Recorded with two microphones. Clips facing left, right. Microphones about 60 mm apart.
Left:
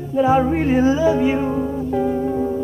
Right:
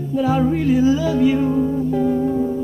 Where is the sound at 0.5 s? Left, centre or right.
Left.